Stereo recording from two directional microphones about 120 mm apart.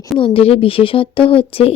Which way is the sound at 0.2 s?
50° left (ahead or behind).